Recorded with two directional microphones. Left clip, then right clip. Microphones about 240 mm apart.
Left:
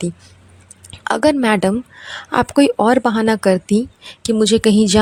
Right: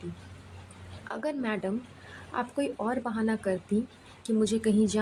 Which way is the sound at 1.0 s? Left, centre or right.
Left.